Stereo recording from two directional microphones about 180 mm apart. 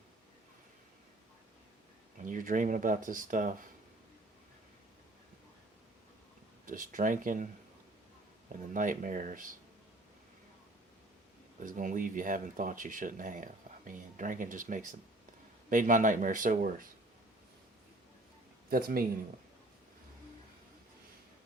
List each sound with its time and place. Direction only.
2.2 s speech: 50° right (ahead or behind)
6.7 s speech: 50° right (ahead or behind)
8.7 s speech: 45° right (ahead or behind)
11.6 s speech: 45° right (ahead or behind)
18.7 s speech: 55° right (ahead or behind)